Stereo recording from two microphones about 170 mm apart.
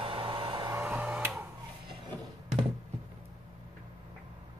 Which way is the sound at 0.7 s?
10° right (ahead or behind).